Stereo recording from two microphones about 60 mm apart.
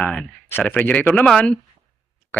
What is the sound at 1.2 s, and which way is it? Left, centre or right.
Speech, centre.